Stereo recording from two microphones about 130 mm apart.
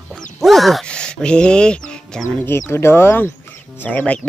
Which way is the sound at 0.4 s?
Centre (ahead or behind).